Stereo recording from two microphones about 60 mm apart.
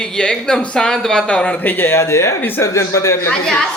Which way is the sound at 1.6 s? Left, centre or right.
Left.